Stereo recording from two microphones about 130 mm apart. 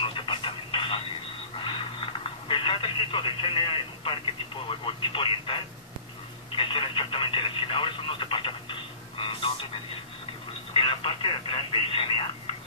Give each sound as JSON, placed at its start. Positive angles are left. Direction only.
{"t": 0.0, "sound": "radio", "side_deg": 40}
{"t": 1.6, "sound": "telephone", "side_deg": 40}
{"t": 4.6, "sound": "speech", "side_deg": 40}
{"t": 10.7, "sound": "speech", "side_deg": 45}